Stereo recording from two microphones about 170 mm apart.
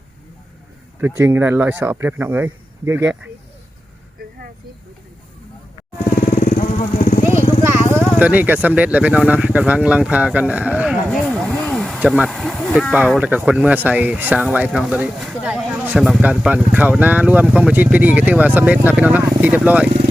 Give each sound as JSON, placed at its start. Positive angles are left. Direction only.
{"t": 1.2, "sound": "speech", "side_deg": -15}
{"t": 6.1, "sound": "vehicle", "side_deg": 55}
{"t": 7.6, "sound": "vehicle", "side_deg": -10}
{"t": 8.6, "sound": "speech", "side_deg": -10}
{"t": 11.1, "sound": "a sound", "side_deg": 5}
{"t": 11.9, "sound": "speech", "side_deg": -5}